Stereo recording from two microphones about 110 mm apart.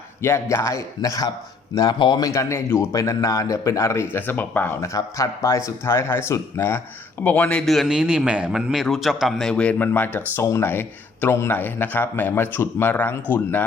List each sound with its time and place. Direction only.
0.2 s speech: 25° left (ahead or behind)
4.8 s speech: 30° left (ahead or behind); by 7.6 s 15° left (ahead or behind)
7.6 s a man's voice: centre (ahead or behind); by 13.7 s 15° left (ahead or behind)